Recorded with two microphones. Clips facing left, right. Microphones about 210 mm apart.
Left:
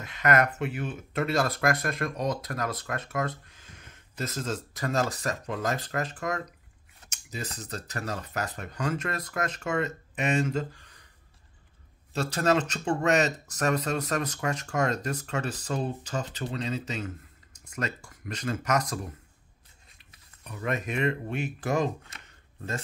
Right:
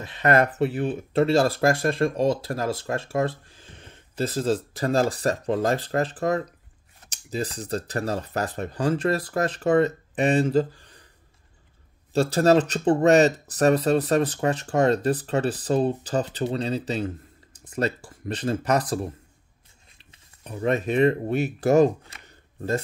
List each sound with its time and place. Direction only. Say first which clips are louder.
0.0 s speech: right 4 dB; 30° right (ahead or behind)
12.1 s speech: right 7 dB; 35° right (ahead or behind)
20.0 s speech: right 6 dB; 30° right (ahead or behind)